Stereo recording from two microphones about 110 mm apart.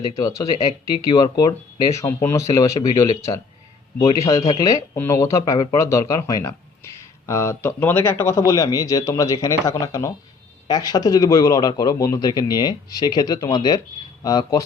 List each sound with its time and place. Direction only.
0.1 s a man's voice: 30° left (ahead or behind)